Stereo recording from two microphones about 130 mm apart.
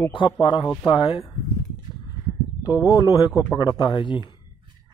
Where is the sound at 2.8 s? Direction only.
30° left (ahead or behind).